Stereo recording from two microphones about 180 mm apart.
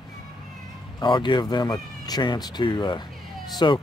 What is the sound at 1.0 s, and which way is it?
Speech, 25° left (ahead or behind).